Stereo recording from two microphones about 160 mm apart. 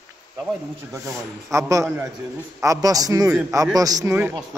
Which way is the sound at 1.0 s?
20° right (ahead or behind).